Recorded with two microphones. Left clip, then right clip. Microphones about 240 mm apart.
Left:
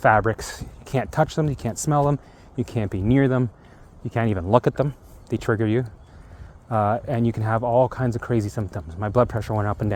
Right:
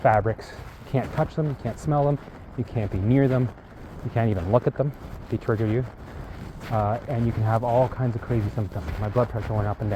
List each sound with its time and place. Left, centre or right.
0.0 s speech: left